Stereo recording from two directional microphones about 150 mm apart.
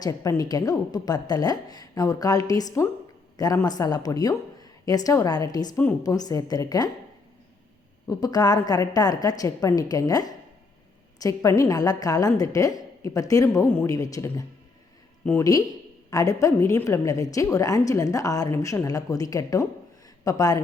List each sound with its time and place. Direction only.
0.0 s a woman's voice: 25° left (ahead or behind)
5.7 s speech: 15° left (ahead or behind)
6.0 s a woman's voice: 25° left (ahead or behind)
8.0 s a woman's voice: 25° left (ahead or behind)